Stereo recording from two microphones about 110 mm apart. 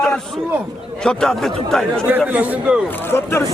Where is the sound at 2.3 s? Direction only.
15° right (ahead or behind).